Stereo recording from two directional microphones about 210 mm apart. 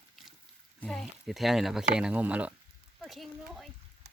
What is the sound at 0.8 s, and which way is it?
Speech, centre (ahead or behind).